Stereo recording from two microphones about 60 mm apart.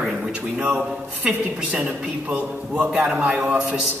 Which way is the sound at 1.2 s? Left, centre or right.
Right.